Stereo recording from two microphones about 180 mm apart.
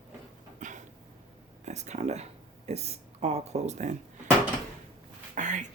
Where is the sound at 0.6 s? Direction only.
45° right (ahead or behind).